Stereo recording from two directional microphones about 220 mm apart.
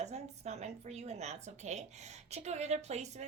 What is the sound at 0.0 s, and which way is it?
A woman's voice, 30° right (ahead or behind).